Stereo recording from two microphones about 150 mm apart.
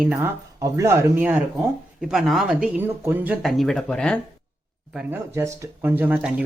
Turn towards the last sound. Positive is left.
turn(degrees=-10)  # may be behind; listen again after turning